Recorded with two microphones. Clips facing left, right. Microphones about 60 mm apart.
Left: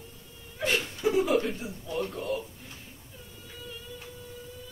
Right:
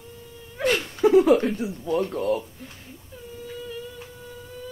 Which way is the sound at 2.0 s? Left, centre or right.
Right.